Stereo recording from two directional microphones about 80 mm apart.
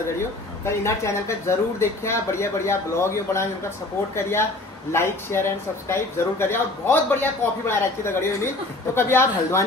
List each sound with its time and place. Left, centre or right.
0.7 s speech: left